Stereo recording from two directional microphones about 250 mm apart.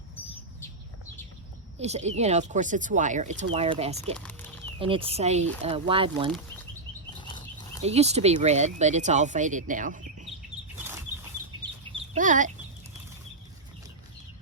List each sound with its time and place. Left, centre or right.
1.8 s speech: right
4.2 s a sound: centre
4.8 s speech: right
7.2 s a sound: centre
7.8 s speech: right
11.9 s chicken: right